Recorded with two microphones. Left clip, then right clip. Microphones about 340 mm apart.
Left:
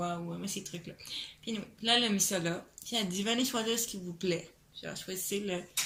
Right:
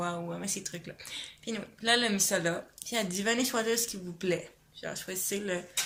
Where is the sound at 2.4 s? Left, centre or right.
Centre.